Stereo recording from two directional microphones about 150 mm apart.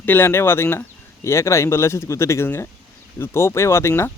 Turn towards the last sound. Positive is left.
turn(degrees=15)  # may be behind; listen again after turning